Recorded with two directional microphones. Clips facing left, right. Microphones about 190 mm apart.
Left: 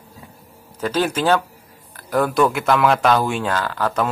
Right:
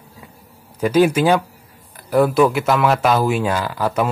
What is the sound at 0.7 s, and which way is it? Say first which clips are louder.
Speech: right 6 dB; 10° right (ahead or behind).